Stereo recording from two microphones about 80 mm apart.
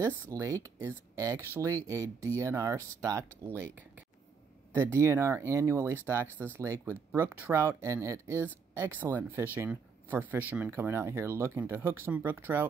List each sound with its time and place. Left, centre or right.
0.3 s speech: right
4.7 s speech: right
10.7 s speech: right